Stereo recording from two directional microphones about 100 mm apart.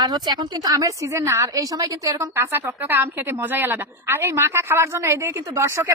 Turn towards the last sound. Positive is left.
turn(degrees=-25)  # may be behind; listen again after turning